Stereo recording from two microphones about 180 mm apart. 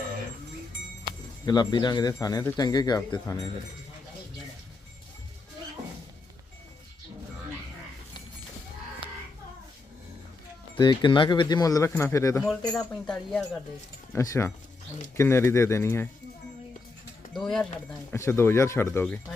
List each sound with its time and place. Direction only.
1.5 s a man's voice: 20° left (ahead or behind)
10.8 s a man's voice: 25° left (ahead or behind)
12.4 s speech: 5° left (ahead or behind)
14.1 s speech: 15° left (ahead or behind)
17.3 s speech: 5° left (ahead or behind)
18.1 s speech: 15° left (ahead or behind)